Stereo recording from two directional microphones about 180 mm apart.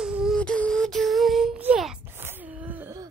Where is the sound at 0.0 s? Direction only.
5° right (ahead or behind).